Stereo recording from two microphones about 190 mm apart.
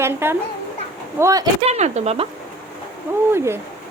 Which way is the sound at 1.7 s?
35° right (ahead or behind).